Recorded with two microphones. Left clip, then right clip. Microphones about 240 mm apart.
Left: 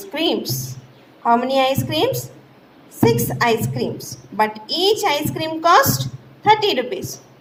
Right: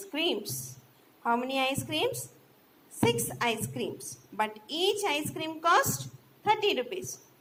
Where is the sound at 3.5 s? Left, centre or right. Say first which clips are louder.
Left 12 dB; left.